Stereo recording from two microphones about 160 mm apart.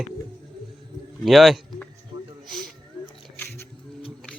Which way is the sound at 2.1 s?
30° right (ahead or behind).